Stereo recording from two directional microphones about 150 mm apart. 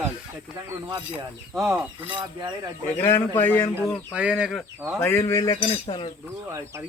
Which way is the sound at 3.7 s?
10° right (ahead or behind).